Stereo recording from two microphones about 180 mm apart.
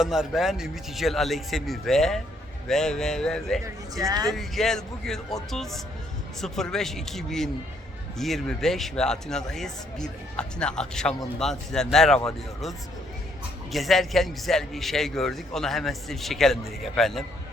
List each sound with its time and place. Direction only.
0.0 s speech: centre (ahead or behind)
4.1 s speech: 20° right (ahead or behind)
4.4 s speech: centre (ahead or behind)
13.7 s speech: centre (ahead or behind)